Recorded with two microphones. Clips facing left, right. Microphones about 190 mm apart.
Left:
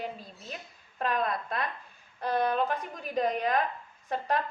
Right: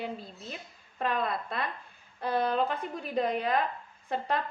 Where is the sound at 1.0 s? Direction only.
5° right (ahead or behind).